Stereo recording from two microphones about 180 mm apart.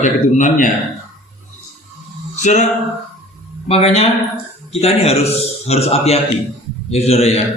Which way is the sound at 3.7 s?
35° left (ahead or behind).